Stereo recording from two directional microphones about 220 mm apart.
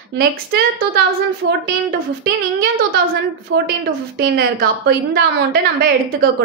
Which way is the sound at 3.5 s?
45° right (ahead or behind).